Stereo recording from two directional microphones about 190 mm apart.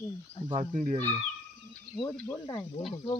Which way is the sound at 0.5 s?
35° right (ahead or behind).